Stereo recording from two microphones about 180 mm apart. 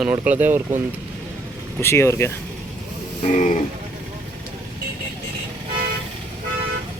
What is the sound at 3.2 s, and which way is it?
Music, 40° left (ahead or behind).